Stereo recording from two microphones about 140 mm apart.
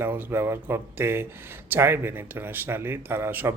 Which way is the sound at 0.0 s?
15° right (ahead or behind).